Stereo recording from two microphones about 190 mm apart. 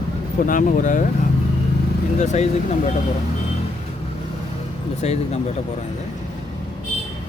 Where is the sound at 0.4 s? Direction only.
45° left (ahead or behind).